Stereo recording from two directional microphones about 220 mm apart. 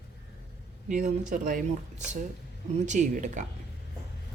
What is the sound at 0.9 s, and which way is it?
Speech, 35° right (ahead or behind).